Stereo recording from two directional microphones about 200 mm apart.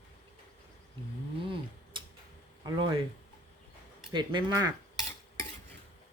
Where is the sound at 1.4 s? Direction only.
25° right (ahead or behind).